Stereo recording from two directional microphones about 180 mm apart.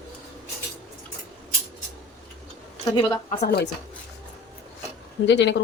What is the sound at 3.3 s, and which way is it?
Speech, 60° left (ahead or behind).